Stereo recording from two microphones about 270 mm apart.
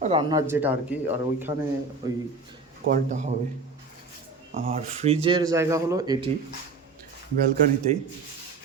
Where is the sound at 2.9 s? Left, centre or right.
Right.